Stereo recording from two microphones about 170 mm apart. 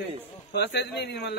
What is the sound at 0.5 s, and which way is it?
Speech, 75° left (ahead or behind).